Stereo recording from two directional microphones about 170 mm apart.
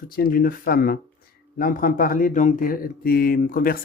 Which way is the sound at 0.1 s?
60° left (ahead or behind).